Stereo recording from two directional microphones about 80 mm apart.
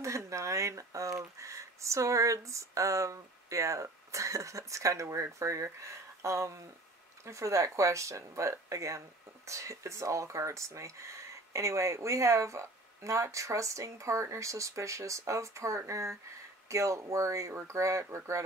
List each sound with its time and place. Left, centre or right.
0.0 s speech: right